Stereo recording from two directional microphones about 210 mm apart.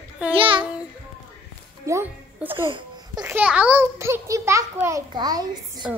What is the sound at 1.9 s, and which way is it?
Speech, 10° right (ahead or behind).